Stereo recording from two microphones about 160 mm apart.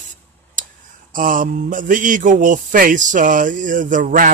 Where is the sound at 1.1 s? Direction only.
55° right (ahead or behind).